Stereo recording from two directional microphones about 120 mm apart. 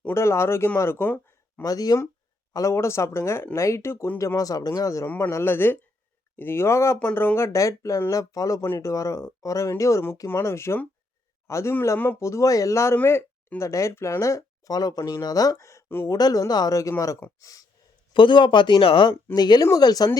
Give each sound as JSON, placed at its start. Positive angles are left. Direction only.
{"t": 0.0, "sound": "speech", "side_deg": 20}
{"t": 0.8, "sound": "a sound", "side_deg": 20}
{"t": 1.6, "sound": "speech", "side_deg": 30}
{"t": 4.4, "sound": "speech", "side_deg": 30}
{"t": 18.1, "sound": "speech", "side_deg": 40}
{"t": 19.3, "sound": "speech", "side_deg": 35}